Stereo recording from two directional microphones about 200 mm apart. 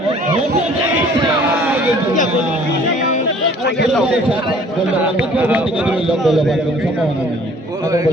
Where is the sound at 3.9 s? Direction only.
5° right (ahead or behind).